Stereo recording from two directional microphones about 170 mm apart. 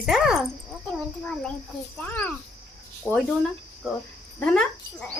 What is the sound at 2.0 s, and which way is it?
Speech, 10° left (ahead or behind).